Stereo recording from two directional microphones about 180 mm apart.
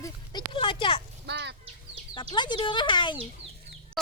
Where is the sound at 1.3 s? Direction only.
70° right (ahead or behind).